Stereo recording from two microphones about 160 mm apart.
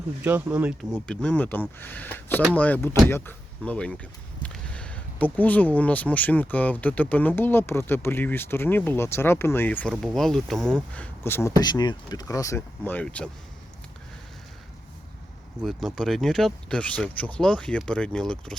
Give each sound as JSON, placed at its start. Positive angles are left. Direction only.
{"t": 0.2, "sound": "speech", "side_deg": -10}
{"t": 0.9, "sound": "speech", "side_deg": 5}
{"t": 11.6, "sound": "speech", "side_deg": 25}
{"t": 15.6, "sound": "speech", "side_deg": 0}